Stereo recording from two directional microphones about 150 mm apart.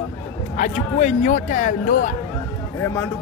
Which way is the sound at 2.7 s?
15° left (ahead or behind).